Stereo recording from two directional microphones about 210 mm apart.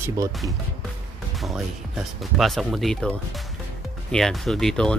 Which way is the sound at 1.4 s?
Centre (ahead or behind).